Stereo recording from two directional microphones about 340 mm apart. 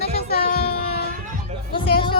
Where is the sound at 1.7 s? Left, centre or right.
Centre.